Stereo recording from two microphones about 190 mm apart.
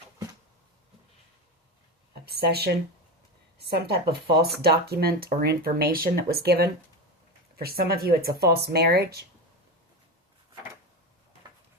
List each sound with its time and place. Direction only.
2.2 s speech: 55° right (ahead or behind)
3.8 s speech: 55° right (ahead or behind)